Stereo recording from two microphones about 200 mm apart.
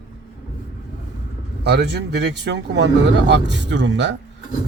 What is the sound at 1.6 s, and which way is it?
Speech, 55° right (ahead or behind).